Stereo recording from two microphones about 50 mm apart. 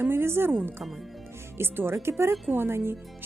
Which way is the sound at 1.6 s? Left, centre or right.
Right.